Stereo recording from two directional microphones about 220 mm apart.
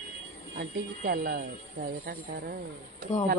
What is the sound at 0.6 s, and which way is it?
Speech, 45° right (ahead or behind).